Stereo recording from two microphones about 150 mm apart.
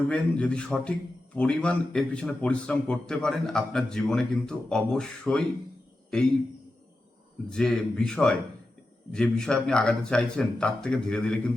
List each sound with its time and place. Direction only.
0.1 s a man's voice: 5° left (ahead or behind)
7.5 s a man's voice: 5° left (ahead or behind)